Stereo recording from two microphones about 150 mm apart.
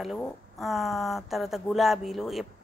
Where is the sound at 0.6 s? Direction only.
Centre (ahead or behind).